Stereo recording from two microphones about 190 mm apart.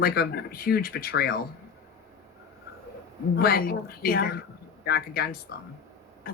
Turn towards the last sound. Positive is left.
turn(degrees=55)  # may be behind; listen again after turning